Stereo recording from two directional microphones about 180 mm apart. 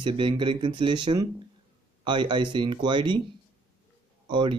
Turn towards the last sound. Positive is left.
turn(degrees=-25)  # may be behind; listen again after turning